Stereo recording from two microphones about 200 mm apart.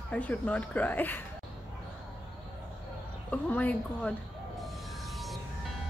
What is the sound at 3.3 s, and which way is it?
Speech, 5° left (ahead or behind).